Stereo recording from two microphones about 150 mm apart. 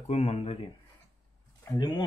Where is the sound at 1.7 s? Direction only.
30° left (ahead or behind).